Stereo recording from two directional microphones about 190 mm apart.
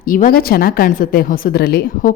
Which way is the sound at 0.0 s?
45° left (ahead or behind).